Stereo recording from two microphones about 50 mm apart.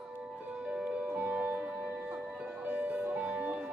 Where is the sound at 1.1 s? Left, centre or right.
Right.